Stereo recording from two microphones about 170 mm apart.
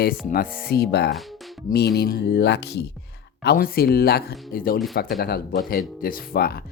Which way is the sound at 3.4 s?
60° left (ahead or behind).